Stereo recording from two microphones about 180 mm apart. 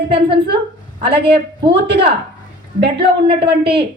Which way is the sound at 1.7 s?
65° right (ahead or behind).